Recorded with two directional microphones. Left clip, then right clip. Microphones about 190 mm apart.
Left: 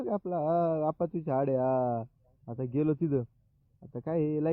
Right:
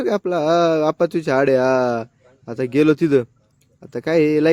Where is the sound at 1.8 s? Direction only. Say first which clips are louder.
Right 11 dB; 30° right (ahead or behind).